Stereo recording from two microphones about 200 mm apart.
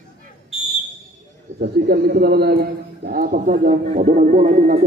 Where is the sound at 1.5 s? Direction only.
55° right (ahead or behind).